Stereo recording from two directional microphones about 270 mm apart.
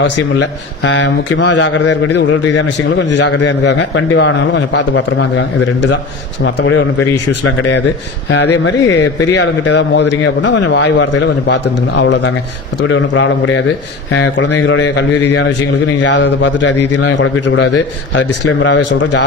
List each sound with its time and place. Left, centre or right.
0.0 s a man's voice: left
8.3 s a man's voice: left
18.4 s a man's voice: left